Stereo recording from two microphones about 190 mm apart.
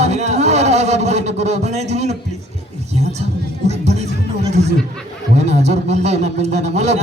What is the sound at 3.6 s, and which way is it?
Music, 35° right (ahead or behind).